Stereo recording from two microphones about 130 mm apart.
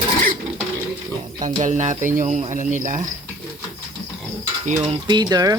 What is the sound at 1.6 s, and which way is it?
Speech, 70° right (ahead or behind).